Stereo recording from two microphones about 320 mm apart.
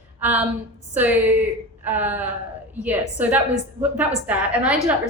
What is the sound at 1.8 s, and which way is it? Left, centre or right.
A woman's voice, centre.